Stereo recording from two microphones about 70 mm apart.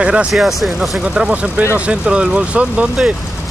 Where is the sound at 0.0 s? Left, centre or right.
Centre.